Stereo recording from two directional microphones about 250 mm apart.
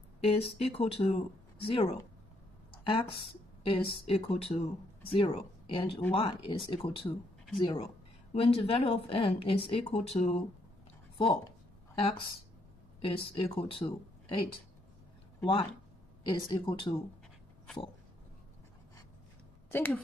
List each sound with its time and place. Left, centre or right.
0.2 s speech: left
2.7 s a sound: left
3.6 s speech: left
11.9 s a woman's voice: left
16.3 s speech: centre
19.7 s a woman's voice: centre